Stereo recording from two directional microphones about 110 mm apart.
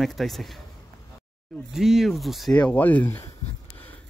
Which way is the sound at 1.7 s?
5° right (ahead or behind).